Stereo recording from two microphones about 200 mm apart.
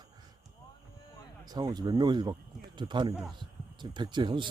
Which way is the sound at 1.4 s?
20° right (ahead or behind).